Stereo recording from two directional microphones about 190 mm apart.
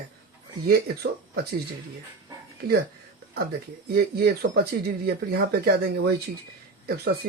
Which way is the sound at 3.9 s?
55° right (ahead or behind).